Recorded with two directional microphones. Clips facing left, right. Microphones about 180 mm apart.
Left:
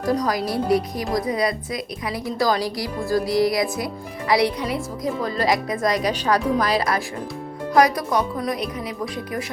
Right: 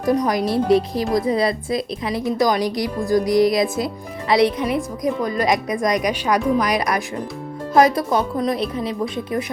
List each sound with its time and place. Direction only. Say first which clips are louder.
0.0 s a woman's voice: right 3 dB; 20° right (ahead or behind)